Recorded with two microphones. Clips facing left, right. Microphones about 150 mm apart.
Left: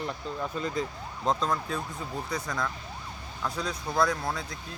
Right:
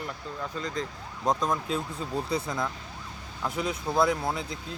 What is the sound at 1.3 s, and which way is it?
Speech, 15° right (ahead or behind).